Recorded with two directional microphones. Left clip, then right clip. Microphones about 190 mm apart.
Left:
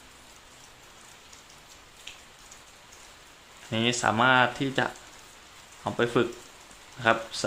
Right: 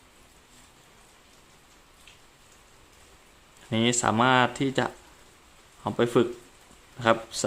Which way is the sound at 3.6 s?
30° right (ahead or behind).